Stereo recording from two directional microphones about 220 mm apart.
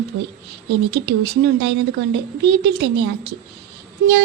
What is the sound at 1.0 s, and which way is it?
A woman's voice, 55° right (ahead or behind).